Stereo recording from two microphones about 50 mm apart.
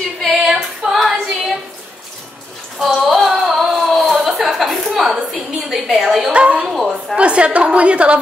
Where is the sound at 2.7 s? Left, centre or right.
Centre.